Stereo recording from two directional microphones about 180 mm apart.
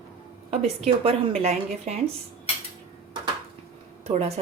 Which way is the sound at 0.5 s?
35° right (ahead or behind).